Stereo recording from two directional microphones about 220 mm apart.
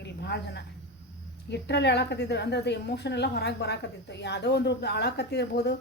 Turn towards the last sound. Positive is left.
turn(degrees=50)  # may be behind; listen again after turning